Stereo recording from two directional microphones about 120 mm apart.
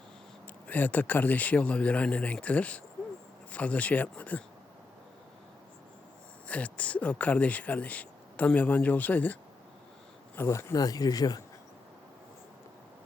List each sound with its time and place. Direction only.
0.7 s speech: 15° left (ahead or behind)
6.5 s speech: 10° left (ahead or behind); by 11.4 s 30° left (ahead or behind)